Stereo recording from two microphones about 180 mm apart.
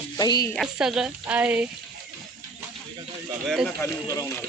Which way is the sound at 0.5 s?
5° right (ahead or behind).